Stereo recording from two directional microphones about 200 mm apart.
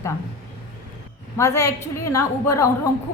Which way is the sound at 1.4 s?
15° left (ahead or behind).